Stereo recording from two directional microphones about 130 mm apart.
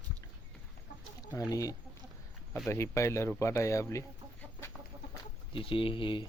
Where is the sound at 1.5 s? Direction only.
25° left (ahead or behind).